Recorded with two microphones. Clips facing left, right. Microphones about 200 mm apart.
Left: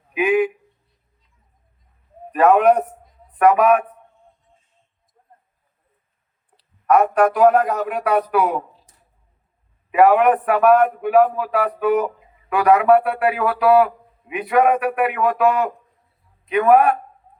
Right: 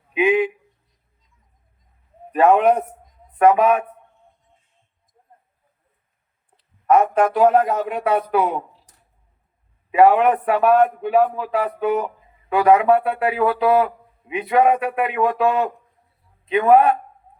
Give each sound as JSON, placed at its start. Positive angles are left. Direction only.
{"t": 0.1, "sound": "a sound", "side_deg": -25}
{"t": 2.3, "sound": "a man's voice", "side_deg": -25}
{"t": 6.8, "sound": "a man's voice", "side_deg": -25}
{"t": 9.9, "sound": "a man's voice", "side_deg": -25}